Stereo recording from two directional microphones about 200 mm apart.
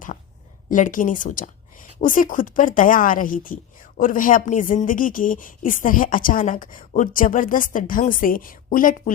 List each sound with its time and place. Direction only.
0.7 s a woman's voice: 40° left (ahead or behind)